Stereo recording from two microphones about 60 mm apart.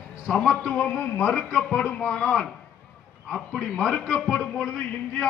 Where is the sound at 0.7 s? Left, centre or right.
Left.